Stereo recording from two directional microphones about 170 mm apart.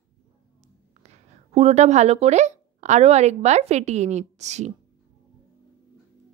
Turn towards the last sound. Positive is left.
turn(degrees=-40)  # may be behind; listen again after turning